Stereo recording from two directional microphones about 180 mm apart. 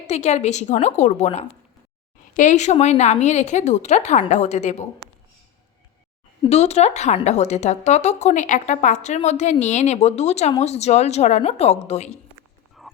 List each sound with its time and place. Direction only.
0.1 s speech: 40° left (ahead or behind)
6.5 s speech: 35° left (ahead or behind)
12.8 s dog: centre (ahead or behind)